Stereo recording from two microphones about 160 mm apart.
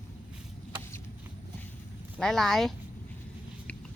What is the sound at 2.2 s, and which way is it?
Speech, centre (ahead or behind).